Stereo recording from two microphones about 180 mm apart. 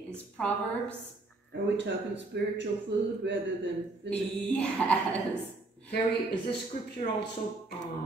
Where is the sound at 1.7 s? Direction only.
75° right (ahead or behind).